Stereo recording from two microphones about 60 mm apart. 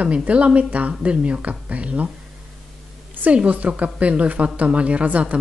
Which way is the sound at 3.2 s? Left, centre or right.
Right.